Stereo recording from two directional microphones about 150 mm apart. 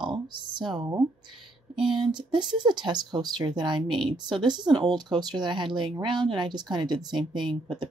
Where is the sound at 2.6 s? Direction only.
30° right (ahead or behind).